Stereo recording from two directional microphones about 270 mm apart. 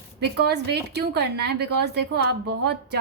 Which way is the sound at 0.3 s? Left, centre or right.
Right.